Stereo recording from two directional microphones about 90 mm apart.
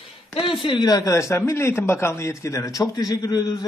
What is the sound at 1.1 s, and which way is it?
A man's voice, 30° left (ahead or behind).